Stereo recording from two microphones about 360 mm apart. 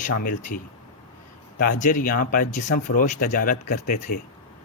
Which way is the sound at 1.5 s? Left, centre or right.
Left.